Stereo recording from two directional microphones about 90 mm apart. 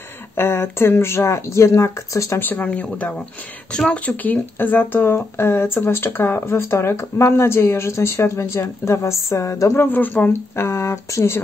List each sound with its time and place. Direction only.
0.4 s speech: 25° left (ahead or behind)
2.4 s speech: 20° left (ahead or behind)
9.8 s speech: 20° left (ahead or behind)